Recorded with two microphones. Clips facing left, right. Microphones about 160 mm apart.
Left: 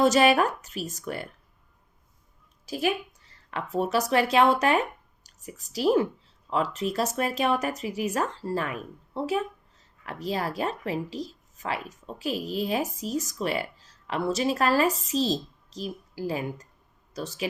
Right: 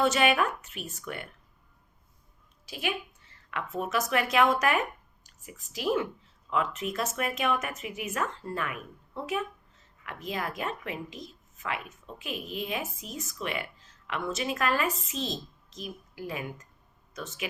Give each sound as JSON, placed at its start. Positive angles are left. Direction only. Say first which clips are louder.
{"t": 0.0, "sound": "speech", "louder": "left 5 dB", "side_deg": 40}
{"t": 2.6, "sound": "a woman's voice", "louder": "left 6 dB", "side_deg": 40}